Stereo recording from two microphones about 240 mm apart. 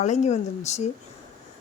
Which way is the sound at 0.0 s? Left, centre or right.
Left.